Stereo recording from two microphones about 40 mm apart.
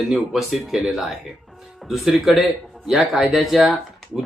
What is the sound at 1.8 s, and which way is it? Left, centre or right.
Speech, centre.